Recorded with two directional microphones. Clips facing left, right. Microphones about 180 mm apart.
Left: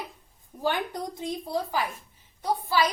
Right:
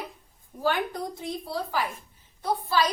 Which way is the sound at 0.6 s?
15° left (ahead or behind).